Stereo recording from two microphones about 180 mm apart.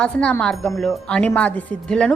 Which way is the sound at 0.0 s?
5° left (ahead or behind).